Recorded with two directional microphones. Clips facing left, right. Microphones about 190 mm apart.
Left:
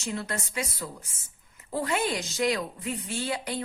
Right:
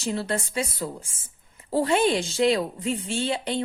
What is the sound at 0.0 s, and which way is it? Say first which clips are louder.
A woman's voice: right 6 dB; 30° right (ahead or behind).